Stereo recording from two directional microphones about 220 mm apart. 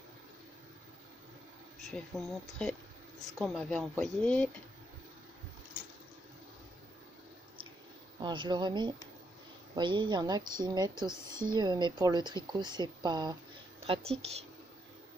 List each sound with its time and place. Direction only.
1.9 s speech: centre (ahead or behind)
8.2 s a woman's voice: 20° right (ahead or behind)